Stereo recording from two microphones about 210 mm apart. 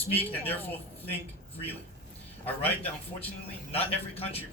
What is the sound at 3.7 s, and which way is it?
Speech, 25° left (ahead or behind).